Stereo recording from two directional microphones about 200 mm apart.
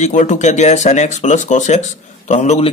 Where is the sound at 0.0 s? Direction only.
35° left (ahead or behind).